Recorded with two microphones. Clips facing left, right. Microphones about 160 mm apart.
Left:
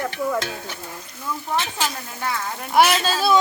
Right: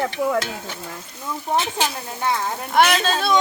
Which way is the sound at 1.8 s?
25° right (ahead or behind).